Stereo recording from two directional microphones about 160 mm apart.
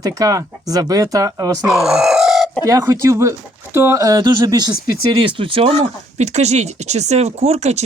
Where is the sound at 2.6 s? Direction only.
20° right (ahead or behind).